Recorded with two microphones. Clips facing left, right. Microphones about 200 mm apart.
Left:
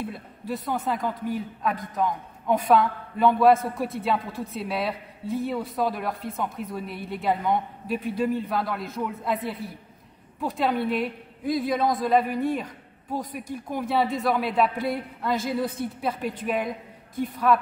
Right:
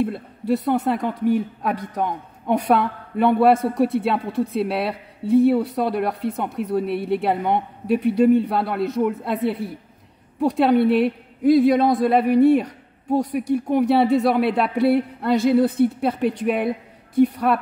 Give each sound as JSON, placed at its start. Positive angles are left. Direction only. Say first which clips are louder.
{"t": 0.0, "sound": "a woman's voice", "louder": "right 10 dB", "side_deg": -65}